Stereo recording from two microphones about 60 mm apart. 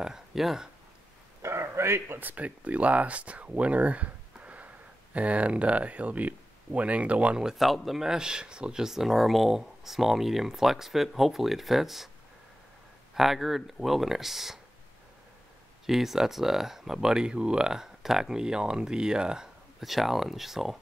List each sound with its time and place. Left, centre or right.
0.0 s speech: centre
1.4 s speech: right; by 12.1 s centre
13.1 s speech: centre
15.9 s speech: centre